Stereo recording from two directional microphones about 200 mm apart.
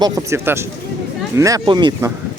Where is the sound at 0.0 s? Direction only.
15° right (ahead or behind).